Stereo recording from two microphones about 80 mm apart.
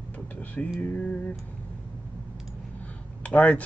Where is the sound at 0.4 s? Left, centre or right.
Centre.